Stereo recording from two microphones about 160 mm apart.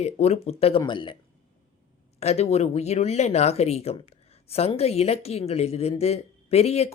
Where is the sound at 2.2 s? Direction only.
40° left (ahead or behind).